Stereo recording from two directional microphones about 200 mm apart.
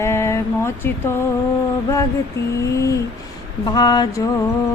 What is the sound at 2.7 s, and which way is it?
Speech, 15° left (ahead or behind).